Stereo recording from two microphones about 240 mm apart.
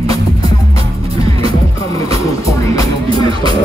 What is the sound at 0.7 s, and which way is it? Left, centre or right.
Music, right.